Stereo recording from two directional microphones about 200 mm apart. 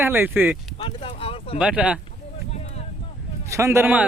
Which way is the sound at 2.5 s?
30° left (ahead or behind).